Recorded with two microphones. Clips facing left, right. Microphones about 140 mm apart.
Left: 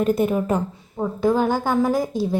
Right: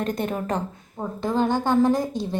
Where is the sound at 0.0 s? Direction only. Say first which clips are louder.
Left 7 dB; 10° left (ahead or behind).